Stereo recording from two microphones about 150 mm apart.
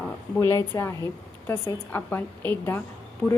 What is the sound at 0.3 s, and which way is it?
A woman's voice, 15° left (ahead or behind).